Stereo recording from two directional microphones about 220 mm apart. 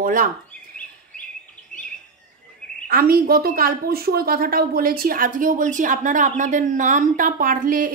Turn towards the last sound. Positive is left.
turn(degrees=-40)  # may be behind; listen again after turning